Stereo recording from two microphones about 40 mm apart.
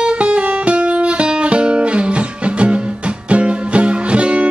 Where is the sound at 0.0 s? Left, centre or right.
Right.